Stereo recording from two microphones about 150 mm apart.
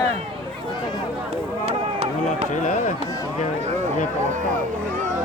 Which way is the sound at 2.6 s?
60° left (ahead or behind).